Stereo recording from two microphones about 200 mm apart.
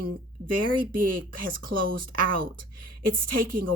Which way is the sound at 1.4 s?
45° right (ahead or behind).